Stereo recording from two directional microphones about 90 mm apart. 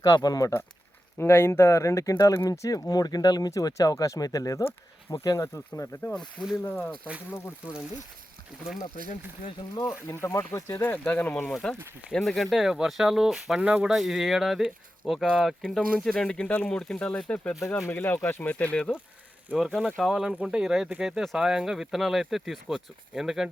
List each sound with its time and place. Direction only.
0.0 s speech: 45° left (ahead or behind)
1.2 s speech: 25° left (ahead or behind)
10.1 s speech: 30° left (ahead or behind); by 13.6 s 5° right (ahead or behind)
13.6 s speech: 15° right (ahead or behind)
13.8 s speech: 5° right (ahead or behind)
15.6 s speech: 5° left (ahead or behind)
17.7 s speech: 25° left (ahead or behind)
19.5 s speech: 5° right (ahead or behind)